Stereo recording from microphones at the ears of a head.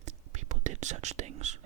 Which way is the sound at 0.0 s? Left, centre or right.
Right.